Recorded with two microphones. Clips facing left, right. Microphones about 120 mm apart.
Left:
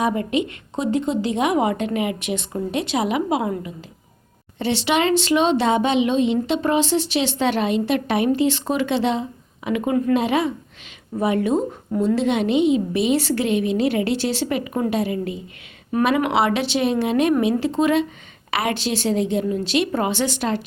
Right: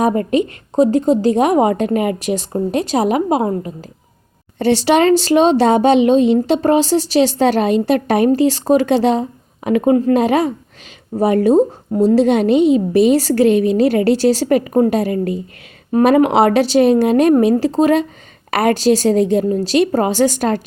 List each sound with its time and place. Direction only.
0.0 s speech: 45° right (ahead or behind)